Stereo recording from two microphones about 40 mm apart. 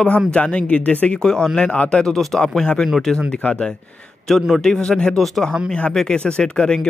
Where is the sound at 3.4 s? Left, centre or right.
Left.